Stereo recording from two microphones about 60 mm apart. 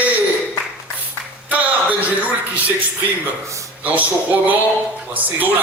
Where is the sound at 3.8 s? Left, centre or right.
Right.